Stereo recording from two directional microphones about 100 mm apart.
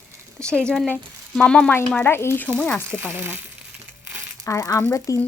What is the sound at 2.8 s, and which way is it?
Speech, 25° right (ahead or behind).